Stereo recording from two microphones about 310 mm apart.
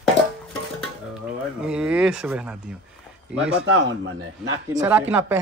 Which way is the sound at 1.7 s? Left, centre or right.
Centre.